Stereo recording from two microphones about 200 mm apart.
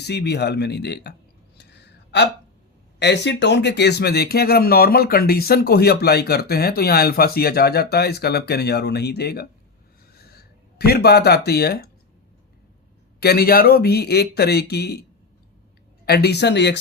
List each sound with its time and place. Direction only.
0.0 s speech: 55° left (ahead or behind)
3.0 s speech: 60° left (ahead or behind)
10.8 s speech: 55° left (ahead or behind)
13.1 s speech: 50° left (ahead or behind)
16.0 s speech: 55° left (ahead or behind)